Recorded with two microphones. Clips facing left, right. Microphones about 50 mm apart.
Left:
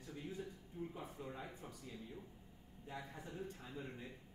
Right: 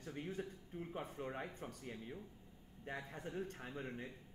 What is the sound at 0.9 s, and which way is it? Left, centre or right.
Speech, right.